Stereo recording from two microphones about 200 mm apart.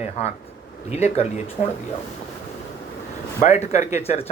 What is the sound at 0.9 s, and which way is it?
Speech, 35° left (ahead or behind).